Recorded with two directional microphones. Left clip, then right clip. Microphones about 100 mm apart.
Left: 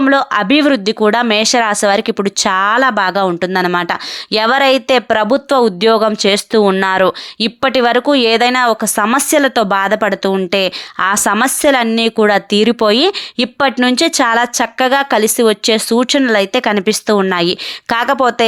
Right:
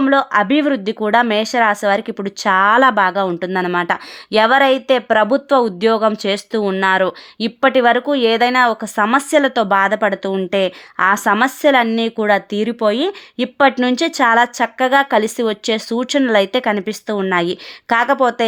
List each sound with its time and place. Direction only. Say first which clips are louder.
0.1 s speech: left 2 dB; 30° left (ahead or behind)
2.6 s speech: right 2 dB; 15° left (ahead or behind)
3.0 s speech: left 2 dB; 30° left (ahead or behind)
7.3 s speech: right 3 dB; 30° left (ahead or behind)
16.2 s speech: left 2 dB; 10° left (ahead or behind)
16.5 s speech: left 4 dB; 25° left (ahead or behind); by 18.4 s 40° left (ahead or behind)